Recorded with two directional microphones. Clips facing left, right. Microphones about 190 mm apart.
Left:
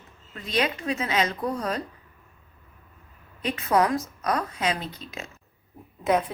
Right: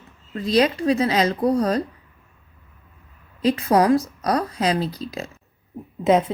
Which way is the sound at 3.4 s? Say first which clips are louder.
Right 6 dB; 35° right (ahead or behind).